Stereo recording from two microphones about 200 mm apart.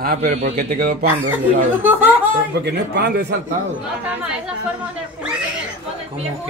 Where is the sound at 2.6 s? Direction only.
55° right (ahead or behind).